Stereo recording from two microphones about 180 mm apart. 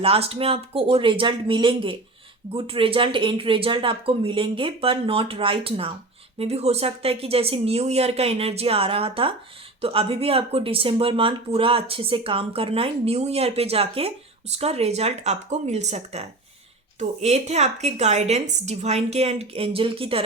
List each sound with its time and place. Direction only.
0.0 s speech: 30° right (ahead or behind)